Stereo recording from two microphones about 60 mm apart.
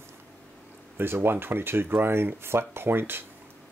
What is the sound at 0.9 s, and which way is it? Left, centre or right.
Speech, right.